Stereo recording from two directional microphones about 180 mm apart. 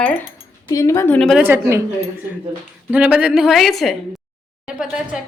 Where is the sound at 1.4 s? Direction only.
10° right (ahead or behind).